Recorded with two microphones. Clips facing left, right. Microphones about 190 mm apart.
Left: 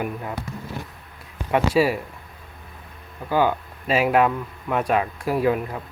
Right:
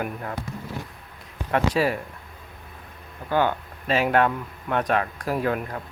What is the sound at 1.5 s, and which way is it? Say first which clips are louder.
Speech: left 3 dB; 5° left (ahead or behind).